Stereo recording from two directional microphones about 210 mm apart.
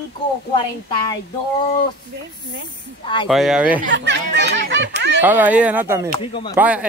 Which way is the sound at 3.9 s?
55° right (ahead or behind).